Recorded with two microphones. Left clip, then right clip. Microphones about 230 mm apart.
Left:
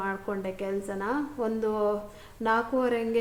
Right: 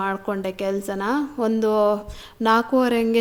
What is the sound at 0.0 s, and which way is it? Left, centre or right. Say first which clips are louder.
A woman's voice: right 7 dB; right.